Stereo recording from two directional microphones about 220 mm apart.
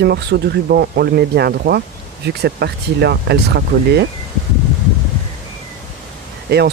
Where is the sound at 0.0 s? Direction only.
50° right (ahead or behind).